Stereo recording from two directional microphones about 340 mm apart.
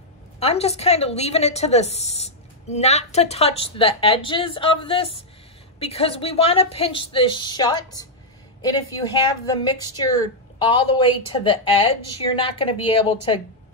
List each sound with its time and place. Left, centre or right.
0.4 s a woman's voice: centre